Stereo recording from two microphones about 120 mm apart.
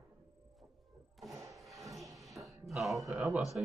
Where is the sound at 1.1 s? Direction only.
Centre (ahead or behind).